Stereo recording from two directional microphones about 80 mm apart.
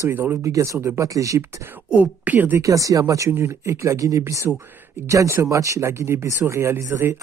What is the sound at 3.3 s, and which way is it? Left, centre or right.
Speech, right.